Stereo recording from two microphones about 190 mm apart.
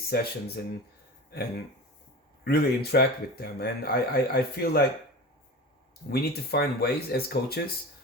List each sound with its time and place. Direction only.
0.1 s speech: 55° left (ahead or behind)
2.4 s speech: 55° left (ahead or behind)
6.1 s speech: 55° left (ahead or behind)